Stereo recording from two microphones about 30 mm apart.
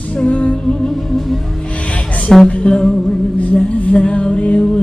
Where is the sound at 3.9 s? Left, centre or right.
Left.